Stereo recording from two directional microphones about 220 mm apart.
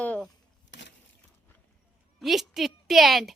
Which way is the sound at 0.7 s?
55° left (ahead or behind).